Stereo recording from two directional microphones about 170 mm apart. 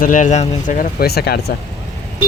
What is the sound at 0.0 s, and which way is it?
Speech, 50° left (ahead or behind).